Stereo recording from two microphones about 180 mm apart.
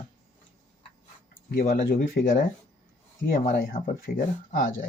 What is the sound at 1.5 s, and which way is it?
Speech, 50° left (ahead or behind).